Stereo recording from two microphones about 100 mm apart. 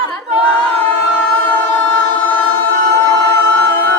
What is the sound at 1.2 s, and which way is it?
Music, 20° left (ahead or behind).